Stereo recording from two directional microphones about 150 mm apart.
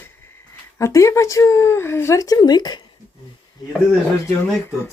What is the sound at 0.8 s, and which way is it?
Speech, 20° left (ahead or behind).